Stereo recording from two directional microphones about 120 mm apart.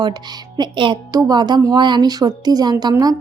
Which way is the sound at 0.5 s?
40° right (ahead or behind).